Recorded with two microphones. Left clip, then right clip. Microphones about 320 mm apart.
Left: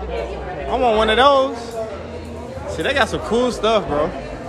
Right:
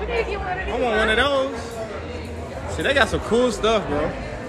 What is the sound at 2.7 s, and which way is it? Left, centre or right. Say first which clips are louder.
A man's voice: left 1 dB; centre.